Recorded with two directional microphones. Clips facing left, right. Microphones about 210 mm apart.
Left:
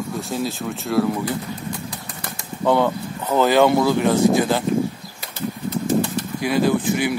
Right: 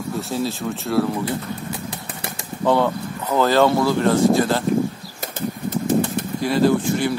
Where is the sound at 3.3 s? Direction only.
15° left (ahead or behind).